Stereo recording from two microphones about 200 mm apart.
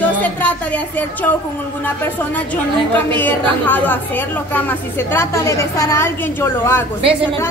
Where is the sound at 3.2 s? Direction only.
10° left (ahead or behind).